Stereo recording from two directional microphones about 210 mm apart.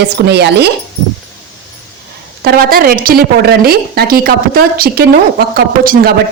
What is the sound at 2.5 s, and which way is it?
A woman's voice, 45° right (ahead or behind).